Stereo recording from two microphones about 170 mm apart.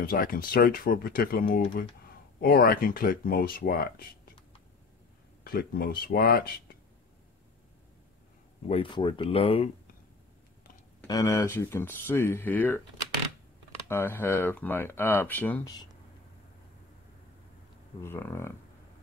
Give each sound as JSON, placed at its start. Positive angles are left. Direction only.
{"t": 0.0, "sound": "speech", "side_deg": 55}
{"t": 2.4, "sound": "speech", "side_deg": 60}
{"t": 5.4, "sound": "speech", "side_deg": 60}
{"t": 8.6, "sound": "speech", "side_deg": 30}
{"t": 11.1, "sound": "speech", "side_deg": 20}
{"t": 13.8, "sound": "speech", "side_deg": 15}
{"t": 18.0, "sound": "speech", "side_deg": 15}